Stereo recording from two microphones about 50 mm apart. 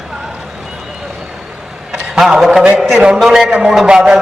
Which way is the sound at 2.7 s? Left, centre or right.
Centre.